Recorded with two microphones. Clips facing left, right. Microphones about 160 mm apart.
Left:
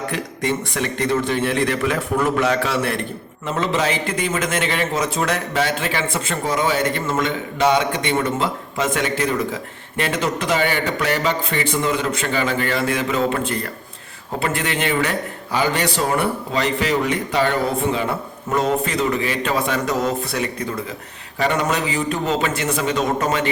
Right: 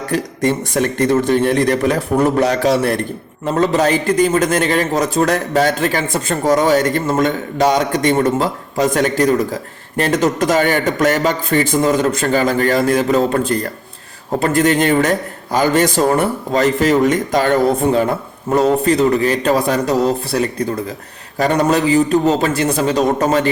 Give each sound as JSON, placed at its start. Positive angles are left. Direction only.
{"t": 0.1, "sound": "a man's voice", "side_deg": -45}